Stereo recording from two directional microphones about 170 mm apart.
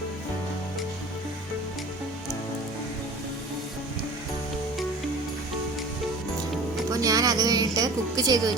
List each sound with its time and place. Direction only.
6.9 s a woman's voice: 20° right (ahead or behind)